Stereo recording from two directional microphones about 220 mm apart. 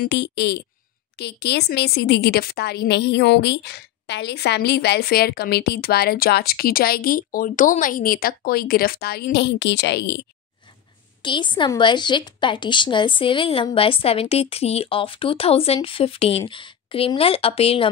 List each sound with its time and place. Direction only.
0.0 s a woman's voice: 50° left (ahead or behind)
11.2 s a woman's voice: 20° left (ahead or behind)